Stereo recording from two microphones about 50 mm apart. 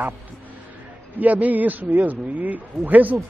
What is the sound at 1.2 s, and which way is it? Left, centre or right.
Speech, right.